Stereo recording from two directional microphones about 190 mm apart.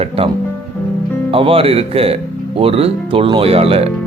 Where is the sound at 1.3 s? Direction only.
30° right (ahead or behind).